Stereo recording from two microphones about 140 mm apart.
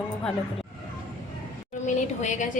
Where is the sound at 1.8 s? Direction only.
60° left (ahead or behind).